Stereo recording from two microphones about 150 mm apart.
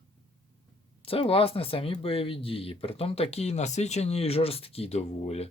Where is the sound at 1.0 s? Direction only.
40° left (ahead or behind).